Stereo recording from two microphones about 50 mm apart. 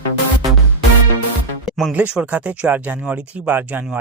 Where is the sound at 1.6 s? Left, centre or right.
Centre.